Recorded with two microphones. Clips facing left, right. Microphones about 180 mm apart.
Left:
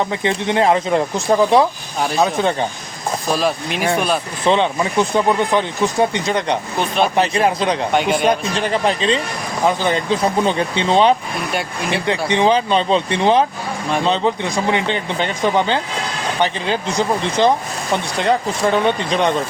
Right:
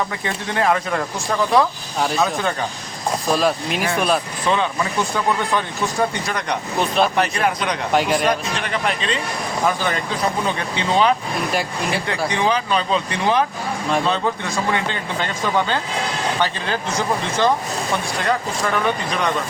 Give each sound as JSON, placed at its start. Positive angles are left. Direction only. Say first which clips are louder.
{"t": 0.0, "sound": "speech", "louder": "left 6 dB", "side_deg": 25}
{"t": 3.2, "sound": "speech", "louder": "even", "side_deg": 0}
{"t": 4.4, "sound": "speech", "louder": "left 6 dB", "side_deg": 30}
{"t": 6.7, "sound": "speech", "louder": "right 1 dB", "side_deg": 0}
{"t": 7.2, "sound": "speech", "louder": "left 4 dB", "side_deg": 30}
{"t": 7.9, "sound": "speech", "louder": "even", "side_deg": 0}
{"t": 8.3, "sound": "speech", "louder": "left 4 dB", "side_deg": 30}
{"t": 11.5, "sound": "speech", "louder": "left 3 dB", "side_deg": 0}
{"t": 12.3, "sound": "speech", "louder": "left 6 dB", "side_deg": 25}